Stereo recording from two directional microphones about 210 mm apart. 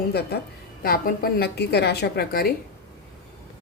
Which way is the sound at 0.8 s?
45° left (ahead or behind).